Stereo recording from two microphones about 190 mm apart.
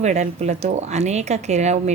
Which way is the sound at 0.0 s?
40° right (ahead or behind).